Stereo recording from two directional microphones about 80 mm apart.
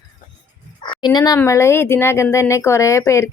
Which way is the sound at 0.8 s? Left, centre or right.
Left.